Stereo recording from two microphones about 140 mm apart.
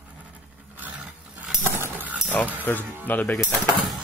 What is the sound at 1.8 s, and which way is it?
Dog, 15° right (ahead or behind).